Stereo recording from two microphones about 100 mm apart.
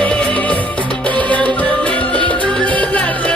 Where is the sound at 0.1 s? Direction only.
10° left (ahead or behind).